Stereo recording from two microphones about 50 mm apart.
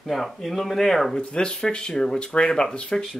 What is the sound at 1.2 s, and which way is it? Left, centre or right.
Speech, centre.